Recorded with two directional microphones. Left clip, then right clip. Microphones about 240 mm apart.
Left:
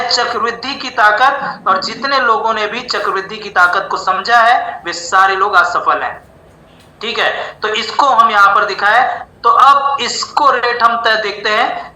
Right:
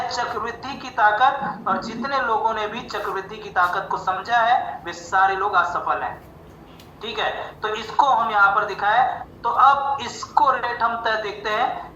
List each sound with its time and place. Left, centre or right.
0.0 s a woman's voice: left